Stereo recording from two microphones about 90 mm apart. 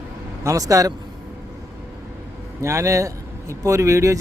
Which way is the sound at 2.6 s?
35° right (ahead or behind).